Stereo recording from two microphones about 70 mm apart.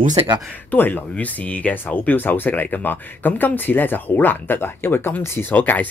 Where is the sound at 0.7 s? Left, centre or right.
Left.